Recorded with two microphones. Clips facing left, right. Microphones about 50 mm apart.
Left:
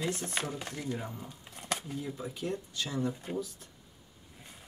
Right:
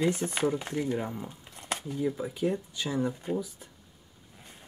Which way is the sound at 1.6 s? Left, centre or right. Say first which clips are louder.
Right 1 dB; centre.